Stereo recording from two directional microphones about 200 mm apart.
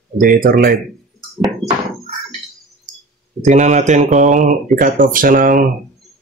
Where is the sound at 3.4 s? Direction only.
35° right (ahead or behind).